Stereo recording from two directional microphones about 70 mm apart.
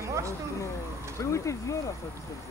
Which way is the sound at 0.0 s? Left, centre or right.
Right.